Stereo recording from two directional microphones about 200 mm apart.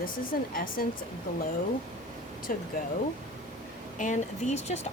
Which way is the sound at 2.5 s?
45° left (ahead or behind).